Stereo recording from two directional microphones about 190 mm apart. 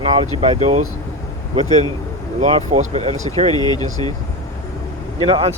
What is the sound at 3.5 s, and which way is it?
Speech, 20° left (ahead or behind).